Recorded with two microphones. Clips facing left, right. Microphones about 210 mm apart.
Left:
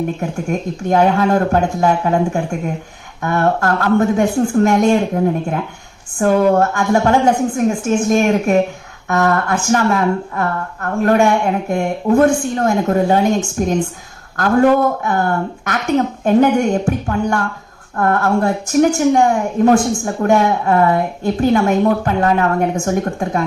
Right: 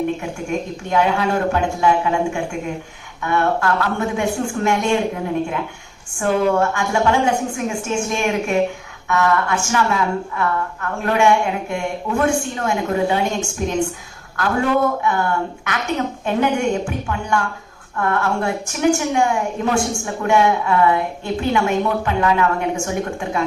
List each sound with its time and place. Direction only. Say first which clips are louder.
0.5 s a woman's voice: left 3 dB; 40° left (ahead or behind)